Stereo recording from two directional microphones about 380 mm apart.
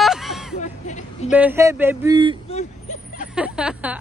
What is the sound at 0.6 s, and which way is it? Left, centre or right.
Speech, centre.